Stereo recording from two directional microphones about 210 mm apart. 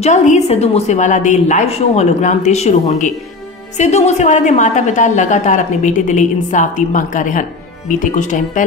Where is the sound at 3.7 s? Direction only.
35° left (ahead or behind).